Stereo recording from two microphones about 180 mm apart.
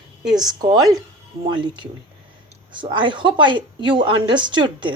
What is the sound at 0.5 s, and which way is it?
Speech, 20° right (ahead or behind).